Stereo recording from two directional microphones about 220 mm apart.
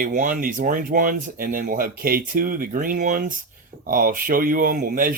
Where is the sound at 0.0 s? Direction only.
35° right (ahead or behind).